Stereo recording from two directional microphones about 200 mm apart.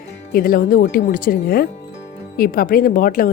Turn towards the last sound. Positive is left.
turn(degrees=45)  # may be behind; listen again after turning